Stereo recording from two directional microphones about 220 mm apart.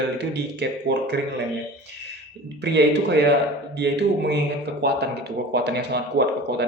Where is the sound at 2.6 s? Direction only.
50° right (ahead or behind).